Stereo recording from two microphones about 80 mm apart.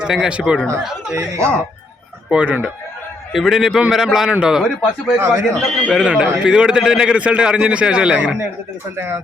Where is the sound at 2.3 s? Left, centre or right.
Centre.